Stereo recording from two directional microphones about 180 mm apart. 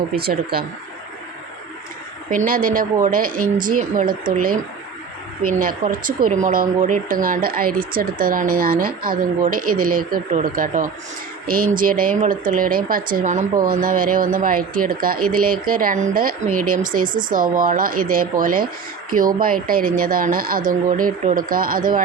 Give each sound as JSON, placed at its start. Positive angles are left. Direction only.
{"t": 0.2, "sound": "speech", "side_deg": -60}
{"t": 2.3, "sound": "speech", "side_deg": -50}
{"t": 5.5, "sound": "speech", "side_deg": -50}
{"t": 17.1, "sound": "speech", "side_deg": -25}
{"t": 17.3, "sound": "speech", "side_deg": -50}